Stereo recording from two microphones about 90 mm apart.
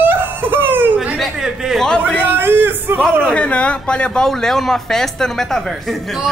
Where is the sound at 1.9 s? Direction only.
10° left (ahead or behind).